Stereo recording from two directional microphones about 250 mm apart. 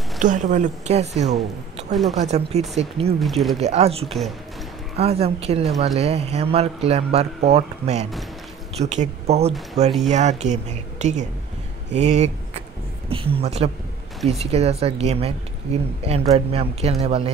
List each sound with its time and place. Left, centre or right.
0.2 s speech: right
3.2 s speech: centre
3.5 s speech: right
4.0 s speech: centre
4.9 s speech: right